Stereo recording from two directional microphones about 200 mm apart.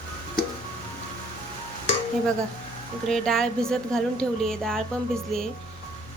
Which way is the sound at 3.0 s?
Centre (ahead or behind).